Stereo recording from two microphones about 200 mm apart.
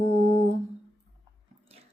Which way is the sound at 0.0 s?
35° right (ahead or behind).